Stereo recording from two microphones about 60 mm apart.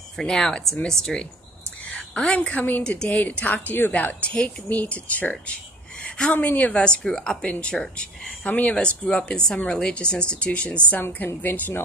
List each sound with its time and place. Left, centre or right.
0.2 s speech: centre
2.1 s speech: centre
6.0 s a sound: centre
6.3 s speech: left
6.8 s speech: centre
11.0 s a woman's voice: left